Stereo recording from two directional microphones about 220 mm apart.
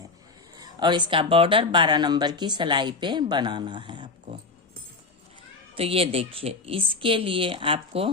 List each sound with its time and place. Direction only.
0.6 s speech: 20° right (ahead or behind)
5.7 s speech: 25° right (ahead or behind)